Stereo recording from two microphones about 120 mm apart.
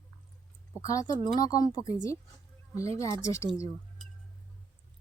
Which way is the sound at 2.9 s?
25° left (ahead or behind).